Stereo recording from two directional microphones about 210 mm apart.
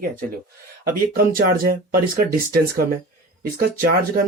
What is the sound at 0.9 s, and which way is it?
Speech, 40° right (ahead or behind).